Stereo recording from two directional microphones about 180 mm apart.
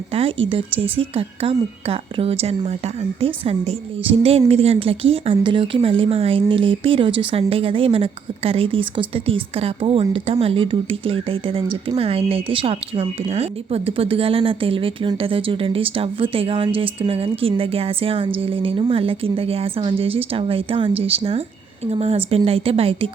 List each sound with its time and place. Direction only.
0.1 s a woman's voice: 30° right (ahead or behind)